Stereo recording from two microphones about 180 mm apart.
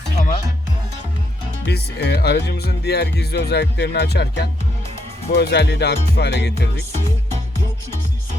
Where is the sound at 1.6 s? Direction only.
65° left (ahead or behind).